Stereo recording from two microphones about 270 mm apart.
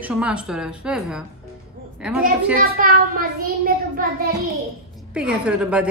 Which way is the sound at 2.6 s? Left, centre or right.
Right.